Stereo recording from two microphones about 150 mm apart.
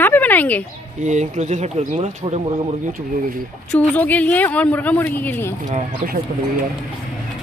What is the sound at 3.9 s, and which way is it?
Speech, 10° left (ahead or behind).